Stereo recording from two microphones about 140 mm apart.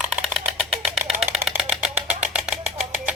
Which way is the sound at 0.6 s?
Centre (ahead or behind).